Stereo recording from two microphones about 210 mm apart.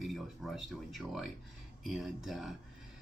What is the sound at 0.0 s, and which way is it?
Speech, centre (ahead or behind).